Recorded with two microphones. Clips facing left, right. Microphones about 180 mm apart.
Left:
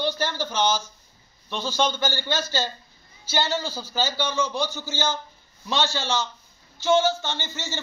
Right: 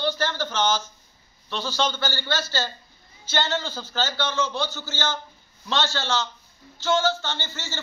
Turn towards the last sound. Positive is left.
turn(degrees=15)  # may be behind; listen again after turning